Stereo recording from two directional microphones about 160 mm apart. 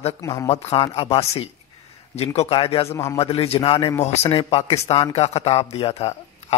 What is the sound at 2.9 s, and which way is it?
Speech, 20° left (ahead or behind).